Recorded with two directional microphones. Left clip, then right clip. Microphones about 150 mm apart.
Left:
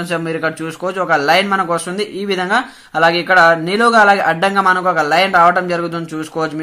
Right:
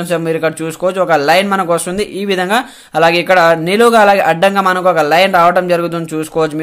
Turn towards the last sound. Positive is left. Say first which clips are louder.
# right 2 dB
turn(degrees=-35)  # may be behind; listen again after turning